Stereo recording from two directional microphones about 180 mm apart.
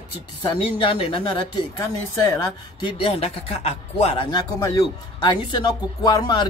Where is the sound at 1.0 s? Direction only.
30° left (ahead or behind).